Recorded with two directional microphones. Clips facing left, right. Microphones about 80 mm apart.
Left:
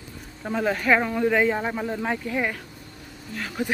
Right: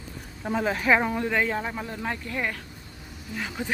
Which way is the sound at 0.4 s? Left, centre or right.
Centre.